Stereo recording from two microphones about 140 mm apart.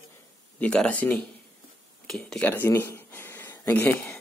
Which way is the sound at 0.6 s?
5° left (ahead or behind).